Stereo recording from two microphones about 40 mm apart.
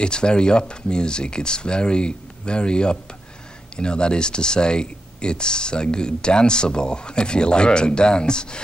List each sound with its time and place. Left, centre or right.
0.0 s speech: left